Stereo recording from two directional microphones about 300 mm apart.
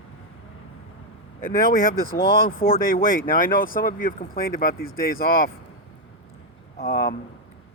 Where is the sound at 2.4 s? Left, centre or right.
Left.